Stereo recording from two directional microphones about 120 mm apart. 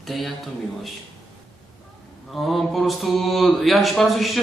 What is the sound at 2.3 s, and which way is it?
Speech, centre (ahead or behind).